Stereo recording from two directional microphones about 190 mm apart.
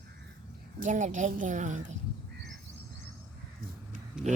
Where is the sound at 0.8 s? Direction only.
40° right (ahead or behind).